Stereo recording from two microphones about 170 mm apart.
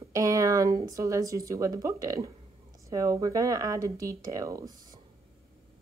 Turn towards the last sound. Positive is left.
turn(degrees=-20)  # may be behind; listen again after turning